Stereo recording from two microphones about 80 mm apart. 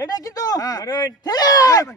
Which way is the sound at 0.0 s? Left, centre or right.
Left.